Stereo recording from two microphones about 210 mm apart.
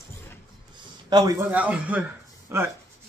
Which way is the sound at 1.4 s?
5° right (ahead or behind).